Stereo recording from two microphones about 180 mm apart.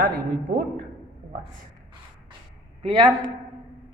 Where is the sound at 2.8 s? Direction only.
25° right (ahead or behind).